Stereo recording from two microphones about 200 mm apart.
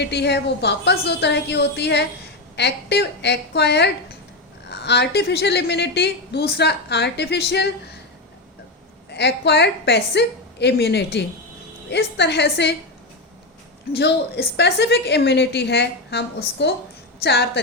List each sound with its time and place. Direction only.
0.0 s a woman's voice: 60° left (ahead or behind)
9.0 s a woman's voice: 55° left (ahead or behind)
13.9 s a woman's voice: 55° left (ahead or behind)